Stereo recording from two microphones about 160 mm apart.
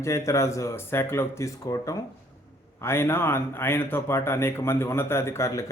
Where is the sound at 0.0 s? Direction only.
20° left (ahead or behind).